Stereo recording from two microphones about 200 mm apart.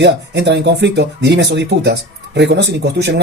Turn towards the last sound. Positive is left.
turn(degrees=-60)  # may be behind; listen again after turning